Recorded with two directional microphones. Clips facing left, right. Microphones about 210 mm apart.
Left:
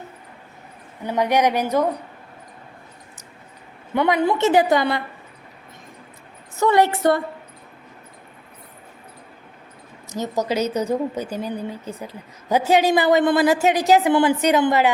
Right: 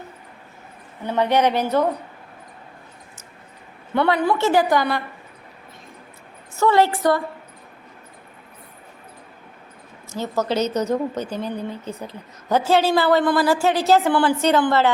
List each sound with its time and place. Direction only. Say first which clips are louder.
1.0 s a woman's voice: even; 15° left (ahead or behind)
3.9 s a woman's voice: even; 15° left (ahead or behind)
6.6 s a woman's voice: even; 20° left (ahead or behind)
10.1 s a woman's voice: even; 15° left (ahead or behind)